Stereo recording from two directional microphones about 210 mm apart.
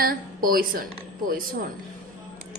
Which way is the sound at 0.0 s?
45° right (ahead or behind).